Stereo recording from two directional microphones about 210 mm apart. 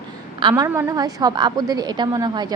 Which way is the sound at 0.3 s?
20° right (ahead or behind).